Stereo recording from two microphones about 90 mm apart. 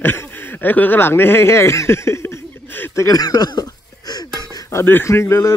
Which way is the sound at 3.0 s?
45° left (ahead or behind).